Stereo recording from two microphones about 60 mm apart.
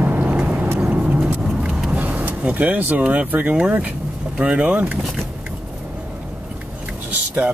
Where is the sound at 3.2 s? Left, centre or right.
Right.